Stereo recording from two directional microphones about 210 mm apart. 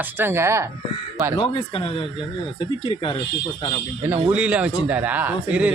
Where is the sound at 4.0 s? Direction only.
10° right (ahead or behind).